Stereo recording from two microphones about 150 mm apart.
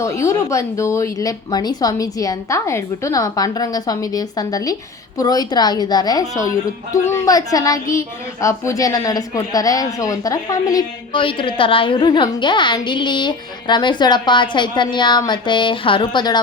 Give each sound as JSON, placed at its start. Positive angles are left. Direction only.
{"t": 0.0, "sound": "a child's voice", "side_deg": 20}